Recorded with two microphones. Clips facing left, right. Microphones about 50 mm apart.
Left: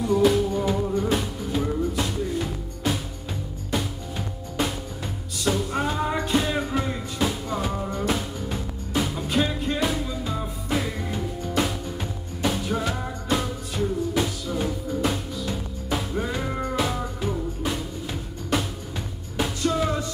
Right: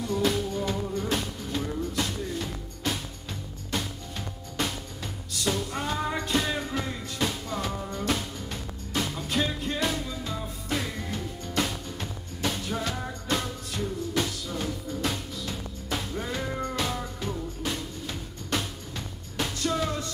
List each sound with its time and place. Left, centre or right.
0.0 s music: centre
16.7 s music: centre